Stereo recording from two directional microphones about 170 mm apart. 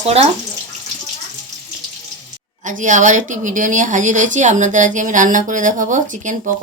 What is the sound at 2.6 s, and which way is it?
A woman's voice, 50° right (ahead or behind).